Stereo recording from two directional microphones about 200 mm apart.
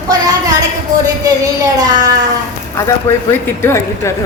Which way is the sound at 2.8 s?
15° left (ahead or behind).